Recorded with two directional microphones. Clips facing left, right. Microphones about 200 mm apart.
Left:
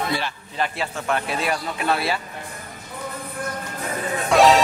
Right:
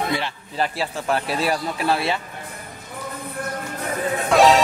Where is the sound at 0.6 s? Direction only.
35° right (ahead or behind).